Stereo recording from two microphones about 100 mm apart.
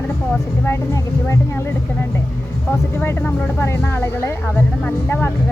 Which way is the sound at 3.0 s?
15° left (ahead or behind).